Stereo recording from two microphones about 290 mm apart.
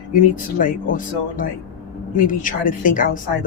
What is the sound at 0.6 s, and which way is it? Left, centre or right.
Speech, left.